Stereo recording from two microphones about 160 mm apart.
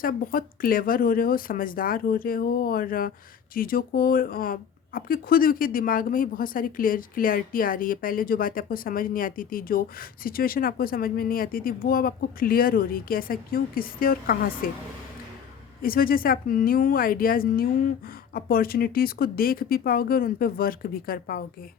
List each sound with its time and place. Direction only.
0.0 s speech: 60° left (ahead or behind)
15.8 s speech: 65° left (ahead or behind)